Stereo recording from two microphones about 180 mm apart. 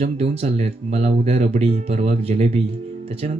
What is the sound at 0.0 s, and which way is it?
Speech, 35° right (ahead or behind).